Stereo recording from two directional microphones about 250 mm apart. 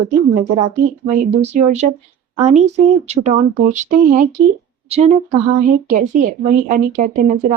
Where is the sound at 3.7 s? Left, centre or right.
Right.